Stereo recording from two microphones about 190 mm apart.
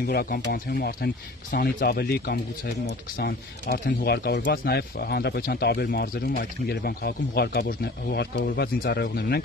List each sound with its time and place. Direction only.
0.0 s speech: 55° left (ahead or behind)